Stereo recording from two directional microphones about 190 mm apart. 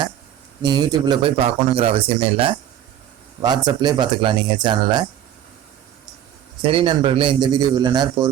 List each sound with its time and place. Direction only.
0.6 s speech: 20° right (ahead or behind)
6.6 s speech: 25° right (ahead or behind)